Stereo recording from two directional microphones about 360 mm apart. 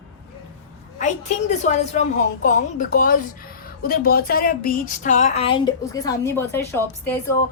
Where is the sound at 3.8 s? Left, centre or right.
Left.